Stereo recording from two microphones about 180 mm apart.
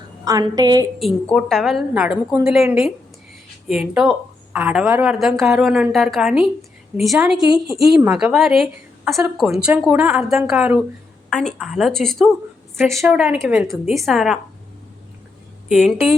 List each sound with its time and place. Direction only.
0.3 s a woman's voice: 20° right (ahead or behind)
0.9 s speech: centre (ahead or behind)
13.7 s speech: centre (ahead or behind)